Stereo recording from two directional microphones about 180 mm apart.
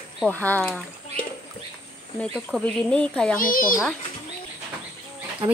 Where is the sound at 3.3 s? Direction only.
50° left (ahead or behind).